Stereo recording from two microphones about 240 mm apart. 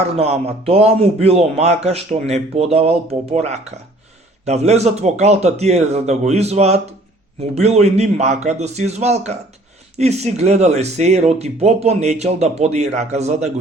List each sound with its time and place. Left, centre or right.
0.0 s a man's voice: right